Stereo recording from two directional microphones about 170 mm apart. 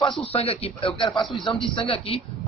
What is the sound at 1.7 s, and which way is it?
Speech, 30° left (ahead or behind).